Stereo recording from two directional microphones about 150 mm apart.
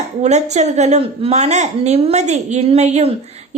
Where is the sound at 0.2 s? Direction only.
50° right (ahead or behind).